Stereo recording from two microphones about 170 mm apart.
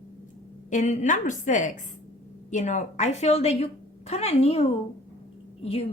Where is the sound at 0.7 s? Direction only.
45° left (ahead or behind).